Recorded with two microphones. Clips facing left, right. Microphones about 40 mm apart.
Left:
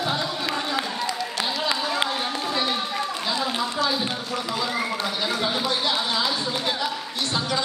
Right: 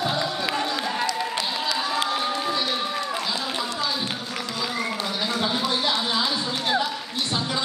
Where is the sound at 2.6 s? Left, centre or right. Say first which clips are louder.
Left 1 dB; centre.